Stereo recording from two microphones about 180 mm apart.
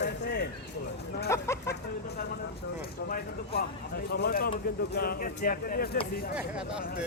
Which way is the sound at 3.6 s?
60° left (ahead or behind).